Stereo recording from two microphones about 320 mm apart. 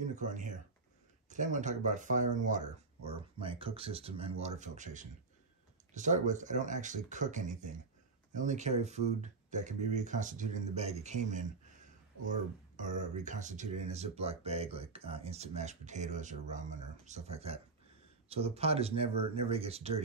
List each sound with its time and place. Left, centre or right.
0.0 s speech: right
12.7 s speech: right